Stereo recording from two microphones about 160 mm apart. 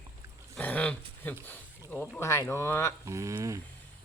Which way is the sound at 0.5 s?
10° left (ahead or behind).